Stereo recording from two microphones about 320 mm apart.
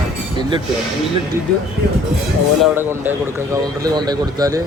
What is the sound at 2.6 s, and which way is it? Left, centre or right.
A man's voice, centre.